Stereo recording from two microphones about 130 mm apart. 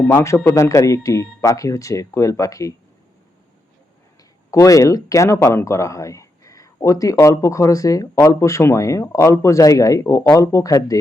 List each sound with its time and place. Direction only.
0.0 s speech: 15° left (ahead or behind)
4.5 s speech: 25° left (ahead or behind)